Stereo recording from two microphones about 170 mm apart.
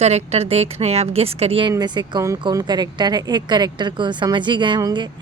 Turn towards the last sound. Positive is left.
turn(degrees=-25)  # may be behind; listen again after turning